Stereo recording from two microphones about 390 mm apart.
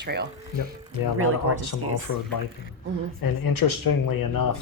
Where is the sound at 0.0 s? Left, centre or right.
Right.